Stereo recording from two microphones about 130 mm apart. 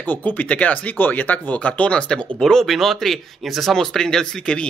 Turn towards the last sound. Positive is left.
turn(degrees=5)  # may be behind; listen again after turning